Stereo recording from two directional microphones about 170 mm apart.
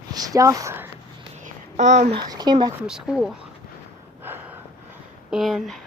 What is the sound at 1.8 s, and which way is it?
Speech, 45° right (ahead or behind).